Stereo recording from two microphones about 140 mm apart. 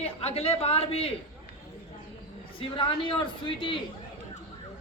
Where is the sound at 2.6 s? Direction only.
35° left (ahead or behind).